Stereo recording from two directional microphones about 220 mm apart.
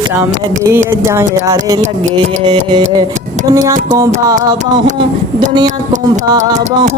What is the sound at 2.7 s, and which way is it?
Music, 20° right (ahead or behind).